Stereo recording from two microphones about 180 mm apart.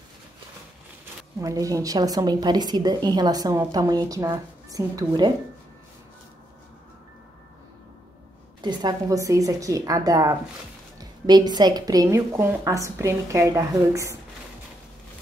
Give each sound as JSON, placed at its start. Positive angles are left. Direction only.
{"t": 1.4, "sound": "a woman's voice", "side_deg": -20}
{"t": 8.5, "sound": "a woman's voice", "side_deg": -25}